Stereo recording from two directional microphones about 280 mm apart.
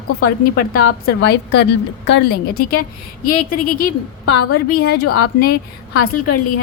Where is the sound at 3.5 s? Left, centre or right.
Left.